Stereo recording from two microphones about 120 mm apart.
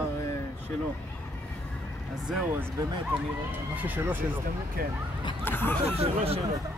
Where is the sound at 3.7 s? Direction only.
15° right (ahead or behind).